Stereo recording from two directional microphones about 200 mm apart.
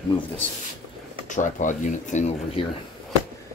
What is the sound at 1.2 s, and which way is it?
Speech, 40° left (ahead or behind).